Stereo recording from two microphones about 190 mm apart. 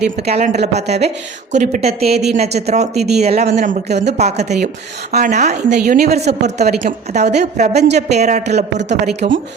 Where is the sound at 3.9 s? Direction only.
65° right (ahead or behind).